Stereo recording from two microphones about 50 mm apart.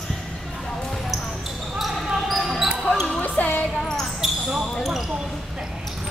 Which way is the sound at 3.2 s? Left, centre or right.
Left.